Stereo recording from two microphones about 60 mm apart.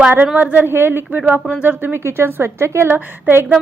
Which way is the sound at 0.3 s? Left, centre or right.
Right.